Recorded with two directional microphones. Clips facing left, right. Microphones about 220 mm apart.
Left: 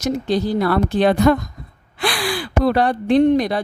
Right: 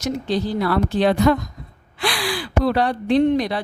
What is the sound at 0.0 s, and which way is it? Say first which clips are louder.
Speech: left 3 dB; 45° left (ahead or behind).